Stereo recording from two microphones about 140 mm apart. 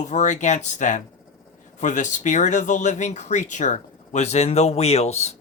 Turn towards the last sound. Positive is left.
turn(degrees=50)  # may be behind; listen again after turning